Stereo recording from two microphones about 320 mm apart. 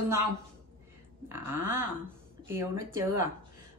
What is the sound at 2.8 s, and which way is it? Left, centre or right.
Speech, right.